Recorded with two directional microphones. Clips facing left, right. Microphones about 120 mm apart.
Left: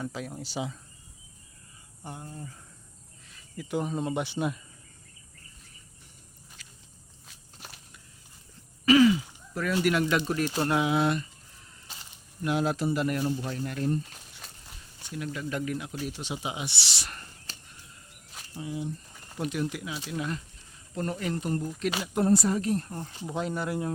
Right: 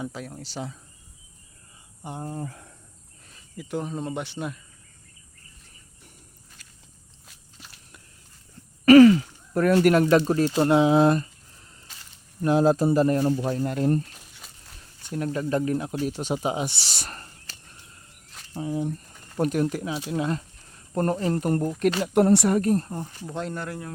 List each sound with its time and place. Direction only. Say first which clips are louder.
0.0 s speech: right 1 dB; centre (ahead or behind)
2.2 s speech: right 9 dB; 55° right (ahead or behind)
3.6 s speech: even; 5° left (ahead or behind)
6.6 s a sound: left 1 dB; 50° right (ahead or behind)
8.8 s speech: right 8 dB; 55° right (ahead or behind); by 10.5 s 40° right (ahead or behind)
10.5 s speech: right 8 dB; 25° right (ahead or behind)
12.4 s speech: right 8 dB; 35° right (ahead or behind)
15.1 s speech: right 8 dB; 40° right (ahead or behind)
18.5 s speech: right 6 dB; 50° right (ahead or behind); by 20.4 s 30° right (ahead or behind)
20.9 s speech: right 7 dB; 50° right (ahead or behind)
22.0 s speech: right 4 dB; 70° right (ahead or behind)
22.6 s speech: right 6 dB; 40° right (ahead or behind)
22.9 s speech: right 4 dB; 15° right (ahead or behind)
23.3 s speech: left 2 dB; 5° left (ahead or behind)